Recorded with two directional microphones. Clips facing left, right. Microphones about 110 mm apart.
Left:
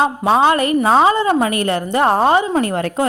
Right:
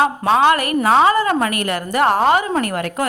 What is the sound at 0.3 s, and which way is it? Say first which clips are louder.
A woman's voice: left 1 dB; 30° left (ahead or behind).